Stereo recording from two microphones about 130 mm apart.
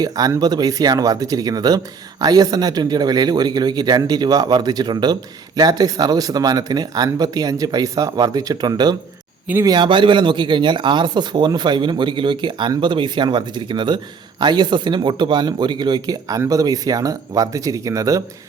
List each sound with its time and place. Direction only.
0.0 s speech: 30° right (ahead or behind)